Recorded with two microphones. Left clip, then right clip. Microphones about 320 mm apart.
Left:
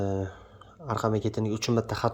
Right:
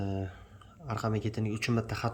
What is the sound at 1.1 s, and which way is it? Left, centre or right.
Speech, centre.